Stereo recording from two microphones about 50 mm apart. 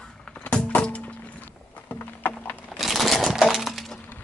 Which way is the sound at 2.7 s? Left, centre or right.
Centre.